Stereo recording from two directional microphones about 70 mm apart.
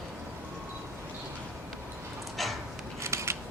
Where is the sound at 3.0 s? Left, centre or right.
Right.